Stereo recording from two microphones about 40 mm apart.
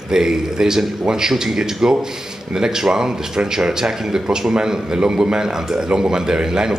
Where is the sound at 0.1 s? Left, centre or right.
Centre.